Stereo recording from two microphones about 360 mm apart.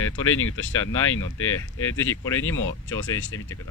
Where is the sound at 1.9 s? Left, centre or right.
Centre.